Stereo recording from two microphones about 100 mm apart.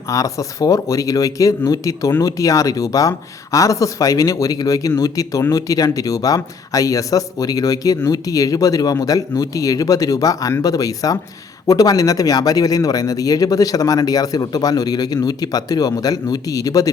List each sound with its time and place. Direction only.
0.1 s speech: 35° left (ahead or behind)